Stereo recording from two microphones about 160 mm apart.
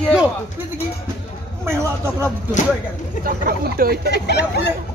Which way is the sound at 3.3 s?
70° right (ahead or behind).